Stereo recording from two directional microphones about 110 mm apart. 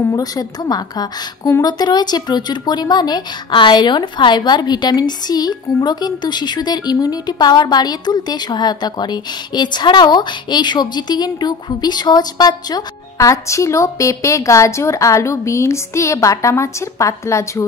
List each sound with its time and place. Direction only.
0.1 s speech: 35° left (ahead or behind)